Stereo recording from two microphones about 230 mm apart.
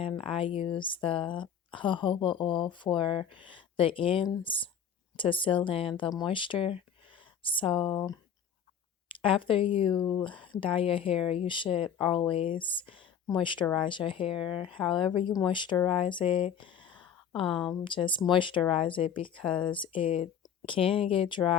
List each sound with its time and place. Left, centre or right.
0.0 s speech: left
9.2 s speech: left
17.4 s speech: centre
17.7 s speech: left
19.5 s speech: centre
19.7 s speech: left